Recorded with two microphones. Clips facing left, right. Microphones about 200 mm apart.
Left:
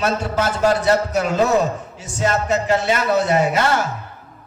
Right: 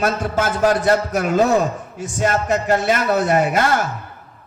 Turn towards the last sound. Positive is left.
turn(degrees=-50)  # may be behind; listen again after turning